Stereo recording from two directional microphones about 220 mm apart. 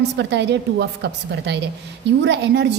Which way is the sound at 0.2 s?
50° right (ahead or behind).